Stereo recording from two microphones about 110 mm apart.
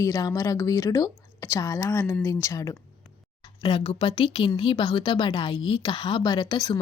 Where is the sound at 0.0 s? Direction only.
30° left (ahead or behind).